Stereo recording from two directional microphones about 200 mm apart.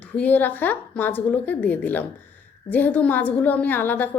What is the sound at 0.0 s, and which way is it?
A woman's voice, 10° left (ahead or behind).